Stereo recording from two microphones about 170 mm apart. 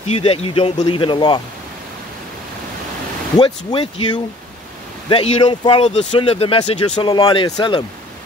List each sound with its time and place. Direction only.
0.0 s speech: 35° left (ahead or behind)
3.3 s speech: 30° left (ahead or behind)